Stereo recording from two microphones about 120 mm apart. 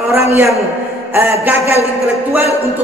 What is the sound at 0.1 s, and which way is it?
Speech, 25° right (ahead or behind).